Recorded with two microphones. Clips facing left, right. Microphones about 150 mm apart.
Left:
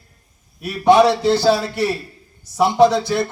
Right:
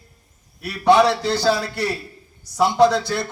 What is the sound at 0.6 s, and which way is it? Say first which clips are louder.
A man's voice: left 3 dB; 20° left (ahead or behind).